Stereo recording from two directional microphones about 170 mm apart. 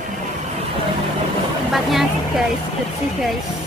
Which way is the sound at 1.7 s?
Centre (ahead or behind).